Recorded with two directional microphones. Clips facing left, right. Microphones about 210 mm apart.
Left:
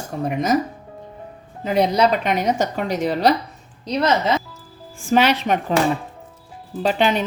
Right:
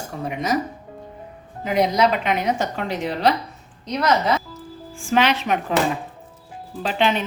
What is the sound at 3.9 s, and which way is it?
Speech, 25° left (ahead or behind).